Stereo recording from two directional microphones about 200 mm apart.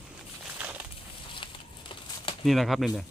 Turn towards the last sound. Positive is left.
turn(degrees=0)  # may be behind; listen again after turning